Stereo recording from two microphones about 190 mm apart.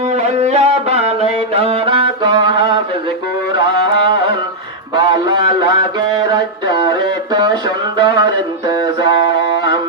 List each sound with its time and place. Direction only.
0.1 s music: 35° right (ahead or behind)
3.6 s carnatic music: 25° right (ahead or behind)
4.9 s a sound: 25° right (ahead or behind)